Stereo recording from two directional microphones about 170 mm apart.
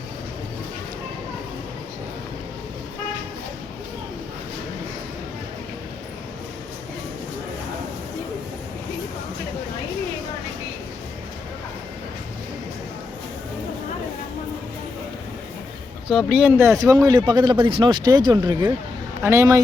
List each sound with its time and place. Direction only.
16.0 s a man's voice: 5° right (ahead or behind)